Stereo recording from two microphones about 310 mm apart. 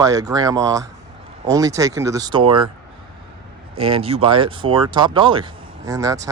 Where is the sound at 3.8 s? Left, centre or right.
Centre.